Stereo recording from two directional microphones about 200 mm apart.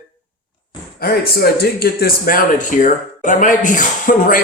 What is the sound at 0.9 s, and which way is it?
Speech, 50° left (ahead or behind).